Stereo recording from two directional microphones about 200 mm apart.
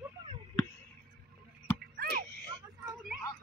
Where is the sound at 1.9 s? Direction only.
50° right (ahead or behind).